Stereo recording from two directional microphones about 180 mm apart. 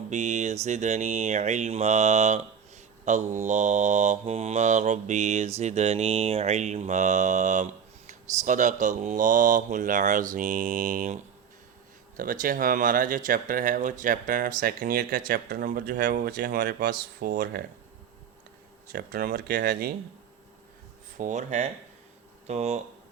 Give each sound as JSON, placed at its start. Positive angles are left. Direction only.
{"t": 0.1, "sound": "speech", "side_deg": -40}
{"t": 18.9, "sound": "speech", "side_deg": -55}
{"t": 21.2, "sound": "speech", "side_deg": -45}